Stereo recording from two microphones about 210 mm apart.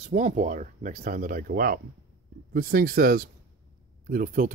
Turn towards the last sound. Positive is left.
turn(degrees=-40)  # may be behind; listen again after turning